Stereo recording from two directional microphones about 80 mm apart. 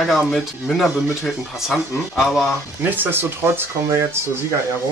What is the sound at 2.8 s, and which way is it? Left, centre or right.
Speech, right.